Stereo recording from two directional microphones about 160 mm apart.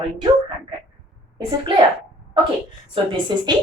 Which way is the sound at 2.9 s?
30° right (ahead or behind).